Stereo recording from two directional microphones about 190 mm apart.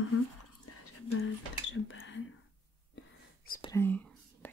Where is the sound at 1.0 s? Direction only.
90° left.